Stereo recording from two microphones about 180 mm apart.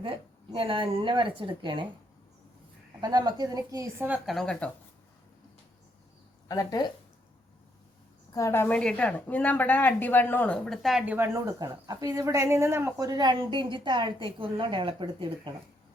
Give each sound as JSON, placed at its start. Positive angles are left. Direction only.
{"t": 0.5, "sound": "a woman's voice", "side_deg": -30}
{"t": 3.0, "sound": "a woman's voice", "side_deg": -20}
{"t": 6.5, "sound": "speech", "side_deg": 20}
{"t": 8.3, "sound": "a woman's voice", "side_deg": 15}